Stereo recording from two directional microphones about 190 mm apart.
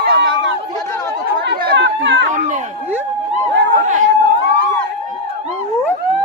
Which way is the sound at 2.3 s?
40° right (ahead or behind).